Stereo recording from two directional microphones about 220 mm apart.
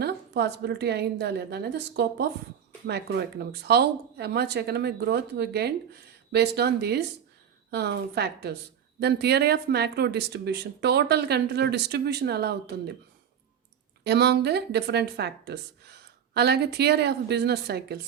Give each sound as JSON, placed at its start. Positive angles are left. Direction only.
{"t": 0.0, "sound": "speech", "side_deg": -50}
{"t": 14.0, "sound": "speech", "side_deg": -50}